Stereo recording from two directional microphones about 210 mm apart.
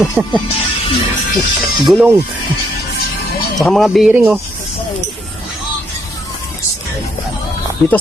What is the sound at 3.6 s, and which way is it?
Speech, centre (ahead or behind).